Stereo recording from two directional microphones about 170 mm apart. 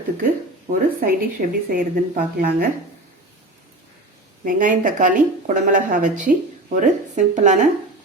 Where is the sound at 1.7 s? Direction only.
60° right (ahead or behind).